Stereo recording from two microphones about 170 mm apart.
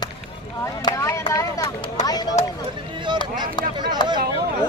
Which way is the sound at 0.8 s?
20° left (ahead or behind).